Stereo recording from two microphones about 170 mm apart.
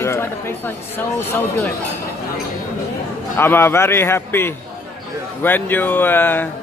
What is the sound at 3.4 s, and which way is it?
Speech, 15° left (ahead or behind).